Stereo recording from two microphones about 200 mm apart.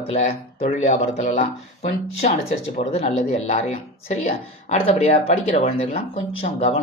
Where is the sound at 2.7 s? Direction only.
30° left (ahead or behind).